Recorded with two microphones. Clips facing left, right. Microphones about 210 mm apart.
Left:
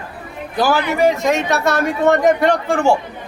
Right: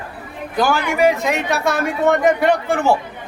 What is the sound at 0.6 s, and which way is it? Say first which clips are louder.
Speech: left 1 dB; centre (ahead or behind).